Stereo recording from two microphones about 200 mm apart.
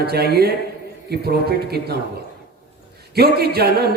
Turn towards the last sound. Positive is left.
turn(degrees=-50)  # may be behind; listen again after turning